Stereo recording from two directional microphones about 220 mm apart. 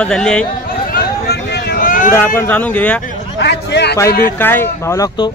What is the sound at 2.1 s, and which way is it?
Speech, 10° left (ahead or behind).